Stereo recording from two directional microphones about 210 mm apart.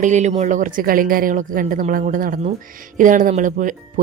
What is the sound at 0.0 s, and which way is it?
A woman's voice, 35° right (ahead or behind).